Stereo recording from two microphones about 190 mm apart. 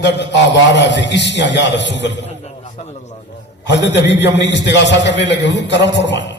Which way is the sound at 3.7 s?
65° left (ahead or behind).